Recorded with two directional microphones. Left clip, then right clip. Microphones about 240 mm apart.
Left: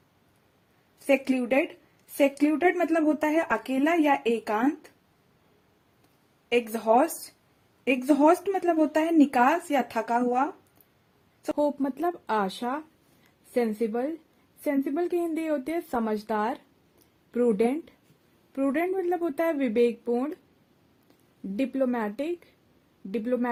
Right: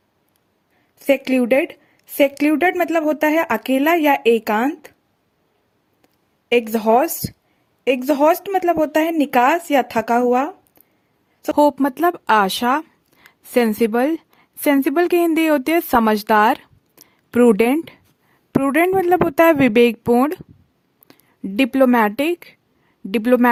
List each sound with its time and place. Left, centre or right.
1.0 s speech: right
6.5 s a woman's voice: right
21.1 s a sound: right
21.5 s speech: right